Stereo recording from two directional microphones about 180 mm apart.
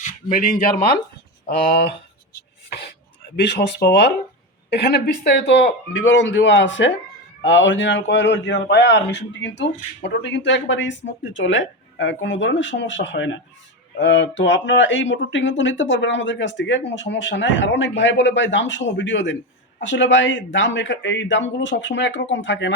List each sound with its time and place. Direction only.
0.0 s a sound: 45° left (ahead or behind)
1.5 s speech: 55° left (ahead or behind)
3.4 s speech: 65° left (ahead or behind)
5.2 s a man's voice: 75° left (ahead or behind); by 13.4 s 90° left
14.0 s a man's voice: 80° left